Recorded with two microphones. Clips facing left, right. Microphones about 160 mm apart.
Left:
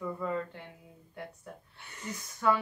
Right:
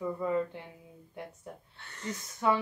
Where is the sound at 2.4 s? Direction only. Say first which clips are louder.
Even; 20° right (ahead or behind).